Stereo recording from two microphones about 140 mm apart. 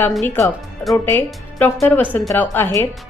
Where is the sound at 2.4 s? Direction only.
15° left (ahead or behind).